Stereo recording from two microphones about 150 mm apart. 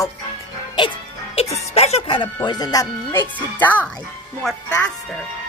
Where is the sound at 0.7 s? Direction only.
35° left (ahead or behind).